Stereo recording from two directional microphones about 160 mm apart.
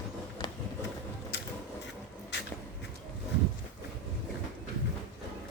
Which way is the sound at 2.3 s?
90° left.